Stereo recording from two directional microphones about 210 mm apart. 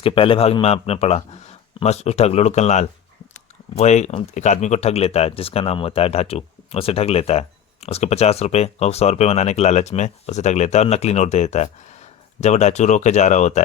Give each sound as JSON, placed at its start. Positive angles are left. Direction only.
{"t": 0.0, "sound": "a man's voice", "side_deg": 25}